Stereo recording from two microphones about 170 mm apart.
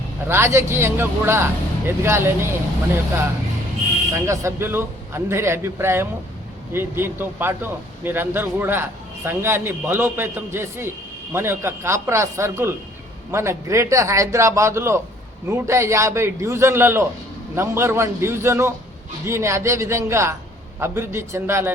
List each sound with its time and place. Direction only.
0.3 s a man's voice: 15° right (ahead or behind)
4.1 s a man's voice: 15° right (ahead or behind)